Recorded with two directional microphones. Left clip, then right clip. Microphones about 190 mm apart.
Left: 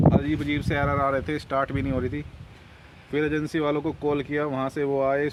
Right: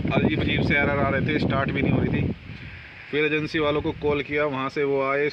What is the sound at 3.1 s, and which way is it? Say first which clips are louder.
Speech: right 2 dB; 10° left (ahead or behind).